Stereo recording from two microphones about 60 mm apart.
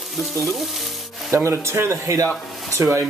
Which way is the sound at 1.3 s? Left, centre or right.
Right.